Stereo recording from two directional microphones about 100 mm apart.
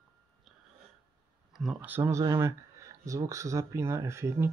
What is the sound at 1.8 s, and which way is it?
Speech, 20° right (ahead or behind).